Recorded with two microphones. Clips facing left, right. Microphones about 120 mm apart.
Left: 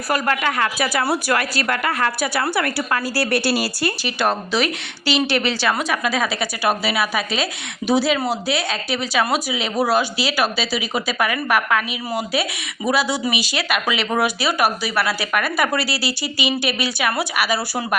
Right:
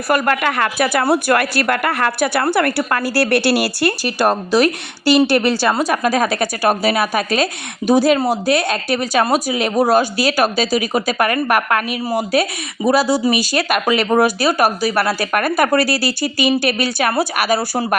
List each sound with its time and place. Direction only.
0.1 s speech: 60° right (ahead or behind)
4.0 s speech: 45° right (ahead or behind)